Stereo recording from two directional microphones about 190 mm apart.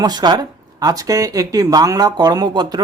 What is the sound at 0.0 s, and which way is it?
Speech, 20° right (ahead or behind).